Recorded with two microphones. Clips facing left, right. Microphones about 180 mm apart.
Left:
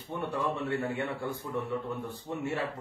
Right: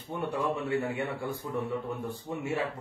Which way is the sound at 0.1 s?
10° right (ahead or behind).